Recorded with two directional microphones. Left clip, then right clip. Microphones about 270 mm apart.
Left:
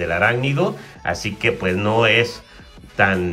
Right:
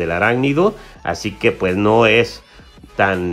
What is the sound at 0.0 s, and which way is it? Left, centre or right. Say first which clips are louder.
Speech: right 2 dB; centre.